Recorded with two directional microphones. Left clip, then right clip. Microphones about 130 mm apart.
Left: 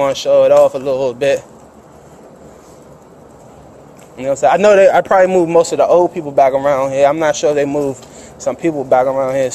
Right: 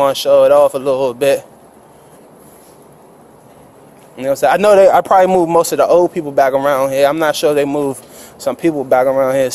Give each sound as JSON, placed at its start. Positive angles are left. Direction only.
{"t": 0.0, "sound": "a man's voice", "side_deg": -70}
{"t": 4.2, "sound": "a man's voice", "side_deg": -80}
{"t": 5.3, "sound": "a man's voice", "side_deg": -70}
{"t": 8.5, "sound": "speech", "side_deg": -90}